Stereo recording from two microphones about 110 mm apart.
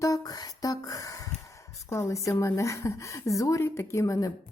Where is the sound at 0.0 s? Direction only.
30° left (ahead or behind).